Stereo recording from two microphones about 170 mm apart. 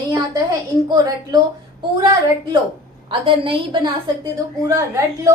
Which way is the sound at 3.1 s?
30° right (ahead or behind).